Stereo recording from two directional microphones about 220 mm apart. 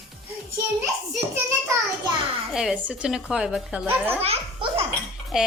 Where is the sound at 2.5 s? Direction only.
Centre (ahead or behind).